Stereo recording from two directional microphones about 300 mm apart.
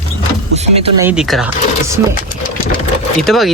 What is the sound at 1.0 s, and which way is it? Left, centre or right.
Speech, centre.